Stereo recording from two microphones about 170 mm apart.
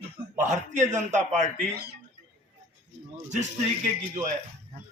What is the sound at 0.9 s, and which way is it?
Speech, 45° right (ahead or behind).